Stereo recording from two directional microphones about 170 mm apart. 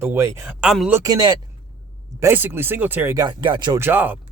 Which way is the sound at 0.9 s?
20° right (ahead or behind).